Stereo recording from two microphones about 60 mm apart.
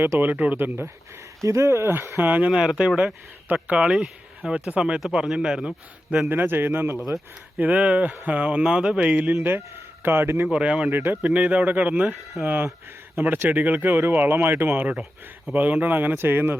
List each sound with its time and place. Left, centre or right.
0.2 s speech: right
1.4 s speech: right
1.9 s speech: right
2.2 s speech: right
2.5 s speech: centre
6.2 s speech: right
7.6 s speech: right
9.3 s speech: right
10.5 s speech: centre
10.9 s speech: right
11.3 s speech: right
12.5 s speech: right